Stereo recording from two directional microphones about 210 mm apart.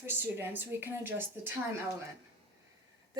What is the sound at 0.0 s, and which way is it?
Speech, 10° right (ahead or behind).